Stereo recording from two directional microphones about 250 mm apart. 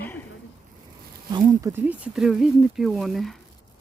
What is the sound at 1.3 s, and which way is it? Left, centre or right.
Speech, centre.